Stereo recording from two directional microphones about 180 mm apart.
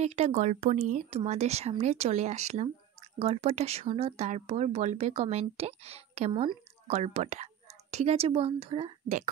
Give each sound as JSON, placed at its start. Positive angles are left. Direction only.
{"t": 0.0, "sound": "speech", "side_deg": -40}